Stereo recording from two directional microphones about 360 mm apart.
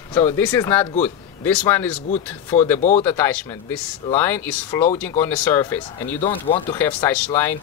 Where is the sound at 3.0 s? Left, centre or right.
Centre.